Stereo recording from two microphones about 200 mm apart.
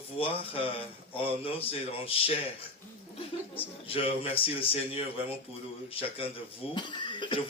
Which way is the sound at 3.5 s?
25° left (ahead or behind).